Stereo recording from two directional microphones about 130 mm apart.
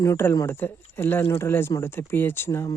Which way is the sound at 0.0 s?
20° left (ahead or behind).